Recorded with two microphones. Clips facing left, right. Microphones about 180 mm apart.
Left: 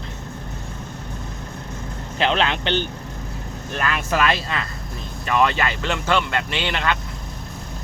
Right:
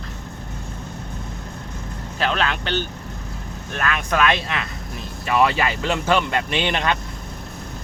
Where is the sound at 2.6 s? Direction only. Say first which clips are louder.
Left 2 dB; 40° right (ahead or behind).